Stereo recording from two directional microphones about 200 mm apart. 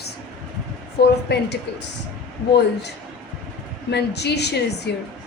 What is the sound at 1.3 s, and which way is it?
Speech, 55° left (ahead or behind).